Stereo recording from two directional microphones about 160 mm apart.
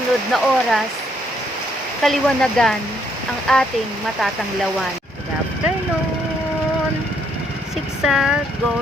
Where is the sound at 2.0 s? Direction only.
Centre (ahead or behind).